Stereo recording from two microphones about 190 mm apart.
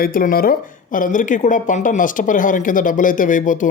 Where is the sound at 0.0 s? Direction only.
50° left (ahead or behind).